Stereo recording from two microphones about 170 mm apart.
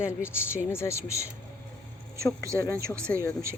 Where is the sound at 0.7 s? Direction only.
15° left (ahead or behind).